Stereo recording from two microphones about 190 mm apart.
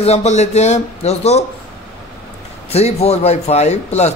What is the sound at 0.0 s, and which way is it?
A man's voice, 35° left (ahead or behind).